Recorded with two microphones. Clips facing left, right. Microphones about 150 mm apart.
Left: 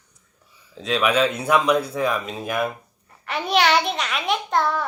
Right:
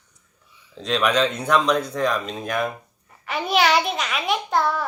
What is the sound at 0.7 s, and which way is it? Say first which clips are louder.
Speech: even; 5° left (ahead or behind).